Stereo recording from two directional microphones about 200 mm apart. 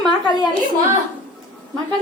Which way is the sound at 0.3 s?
20° left (ahead or behind).